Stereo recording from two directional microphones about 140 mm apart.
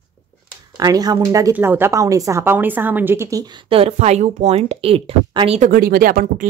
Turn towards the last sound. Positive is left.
turn(degrees=-85)